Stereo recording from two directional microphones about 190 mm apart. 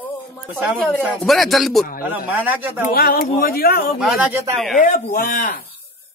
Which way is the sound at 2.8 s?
50° left (ahead or behind).